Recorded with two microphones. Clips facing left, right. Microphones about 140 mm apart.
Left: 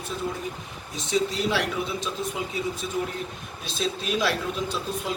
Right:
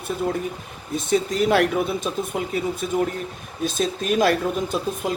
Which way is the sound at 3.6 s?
50° right (ahead or behind).